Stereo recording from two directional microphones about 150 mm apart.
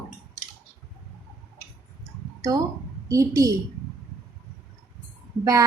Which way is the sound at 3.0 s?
20° right (ahead or behind).